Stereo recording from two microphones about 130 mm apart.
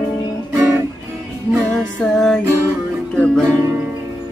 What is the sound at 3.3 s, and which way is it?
Music, 20° right (ahead or behind).